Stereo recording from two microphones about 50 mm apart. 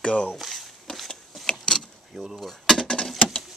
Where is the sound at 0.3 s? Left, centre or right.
Centre.